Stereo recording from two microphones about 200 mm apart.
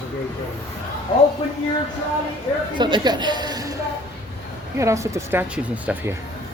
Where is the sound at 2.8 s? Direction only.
20° right (ahead or behind).